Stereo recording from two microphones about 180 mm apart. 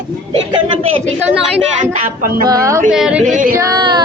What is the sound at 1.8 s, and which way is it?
Speech, 50° right (ahead or behind).